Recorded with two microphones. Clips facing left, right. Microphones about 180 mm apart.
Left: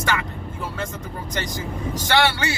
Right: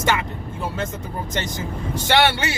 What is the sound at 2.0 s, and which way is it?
Speech, 20° right (ahead or behind).